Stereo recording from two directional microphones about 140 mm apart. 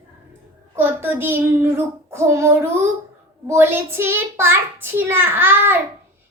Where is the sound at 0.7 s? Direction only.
15° right (ahead or behind).